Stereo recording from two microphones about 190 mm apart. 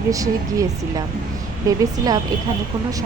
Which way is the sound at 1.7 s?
20° right (ahead or behind).